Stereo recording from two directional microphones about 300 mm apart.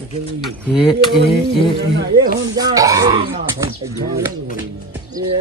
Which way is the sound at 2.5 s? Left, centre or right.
Centre.